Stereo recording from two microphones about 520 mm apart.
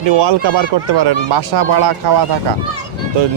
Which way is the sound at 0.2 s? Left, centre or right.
Right.